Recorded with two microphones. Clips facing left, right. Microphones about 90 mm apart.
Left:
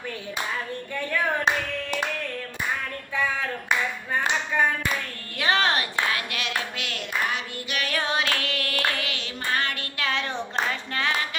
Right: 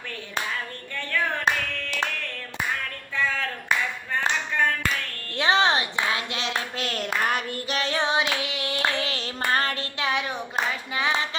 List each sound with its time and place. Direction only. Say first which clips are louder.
3.2 s clapping: even; 15° left (ahead or behind)
5.4 s clapping: right 2 dB; 20° right (ahead or behind); by 7.4 s 45° right (ahead or behind)
7.7 s singing: right 2 dB; 30° right (ahead or behind)
9.5 s child singing: right 2 dB; 35° right (ahead or behind)
10.0 s clapping: right 1 dB; 15° right (ahead or behind)